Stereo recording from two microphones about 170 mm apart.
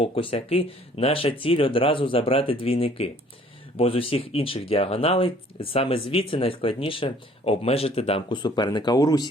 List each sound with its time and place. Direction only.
0.0 s speech: 30° left (ahead or behind)